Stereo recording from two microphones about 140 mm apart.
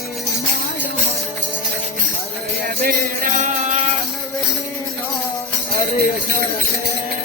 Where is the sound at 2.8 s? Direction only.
65° right (ahead or behind).